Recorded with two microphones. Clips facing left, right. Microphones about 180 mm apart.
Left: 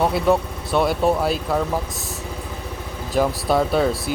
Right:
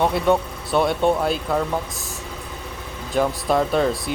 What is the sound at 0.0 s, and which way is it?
Speech, centre (ahead or behind).